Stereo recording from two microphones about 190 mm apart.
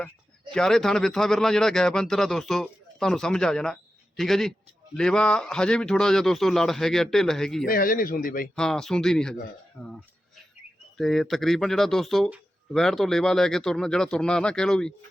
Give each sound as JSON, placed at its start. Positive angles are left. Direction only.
{"t": 0.5, "sound": "speech", "side_deg": 0}
{"t": 7.7, "sound": "speech", "side_deg": 50}
{"t": 8.5, "sound": "speech", "side_deg": 5}
{"t": 10.9, "sound": "speech", "side_deg": 0}